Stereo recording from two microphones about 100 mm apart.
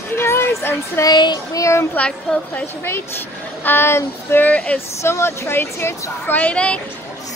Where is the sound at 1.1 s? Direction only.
45° left (ahead or behind).